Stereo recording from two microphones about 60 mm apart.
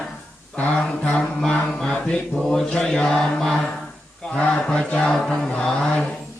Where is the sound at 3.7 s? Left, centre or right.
Centre.